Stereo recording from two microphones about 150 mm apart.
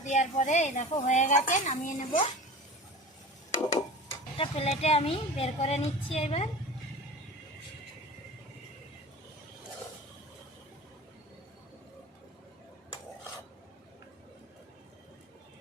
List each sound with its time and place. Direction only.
0.0 s a woman's voice: 55° left (ahead or behind)
4.4 s a woman's voice: 40° left (ahead or behind)